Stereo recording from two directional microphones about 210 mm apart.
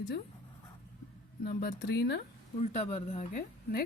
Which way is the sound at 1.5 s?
50° left (ahead or behind).